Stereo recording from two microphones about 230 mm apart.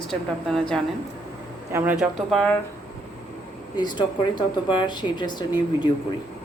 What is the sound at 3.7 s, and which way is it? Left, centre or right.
Speech, centre.